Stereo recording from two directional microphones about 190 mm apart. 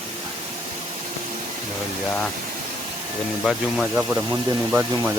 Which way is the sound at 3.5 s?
5° right (ahead or behind).